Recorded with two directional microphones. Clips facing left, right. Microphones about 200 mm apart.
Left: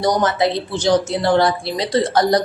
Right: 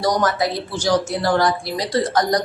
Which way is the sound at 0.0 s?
25° left (ahead or behind).